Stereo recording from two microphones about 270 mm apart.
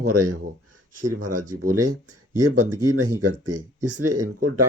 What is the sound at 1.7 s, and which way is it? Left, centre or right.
Speech, right.